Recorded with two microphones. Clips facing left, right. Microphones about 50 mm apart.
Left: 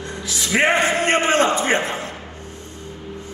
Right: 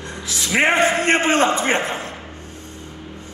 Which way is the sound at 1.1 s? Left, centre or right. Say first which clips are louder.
Even; right.